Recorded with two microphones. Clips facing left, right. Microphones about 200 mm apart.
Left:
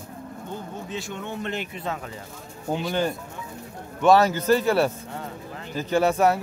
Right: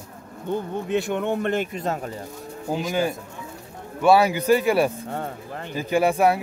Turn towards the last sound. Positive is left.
turn(degrees=-10)  # may be behind; listen again after turning